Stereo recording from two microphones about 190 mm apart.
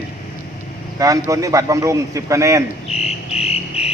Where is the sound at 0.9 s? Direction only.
20° right (ahead or behind).